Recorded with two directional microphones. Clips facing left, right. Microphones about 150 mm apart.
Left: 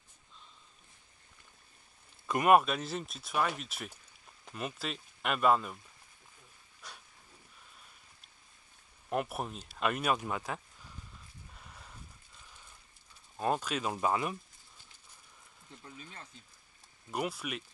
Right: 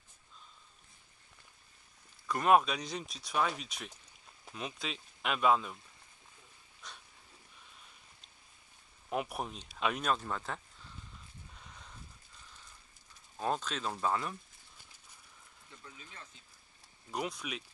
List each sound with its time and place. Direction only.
2.4 s speech: 5° left (ahead or behind)
6.8 s a sound: 10° left (ahead or behind)
9.1 s speech: centre (ahead or behind)
11.5 s a sound: 5° left (ahead or behind)
13.4 s speech: 10° left (ahead or behind)
15.8 s speech: 35° left (ahead or behind)
17.1 s speech: 5° left (ahead or behind)